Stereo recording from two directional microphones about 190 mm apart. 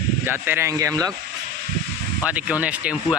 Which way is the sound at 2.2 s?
5° right (ahead or behind).